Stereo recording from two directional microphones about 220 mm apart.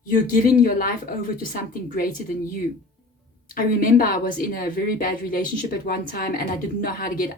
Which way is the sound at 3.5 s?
40° left (ahead or behind).